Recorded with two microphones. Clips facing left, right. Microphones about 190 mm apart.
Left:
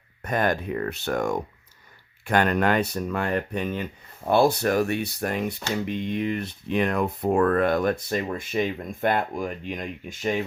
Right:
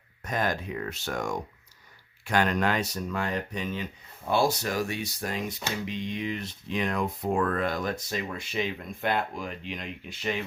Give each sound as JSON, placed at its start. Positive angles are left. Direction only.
{"t": 0.2, "sound": "speech", "side_deg": 60}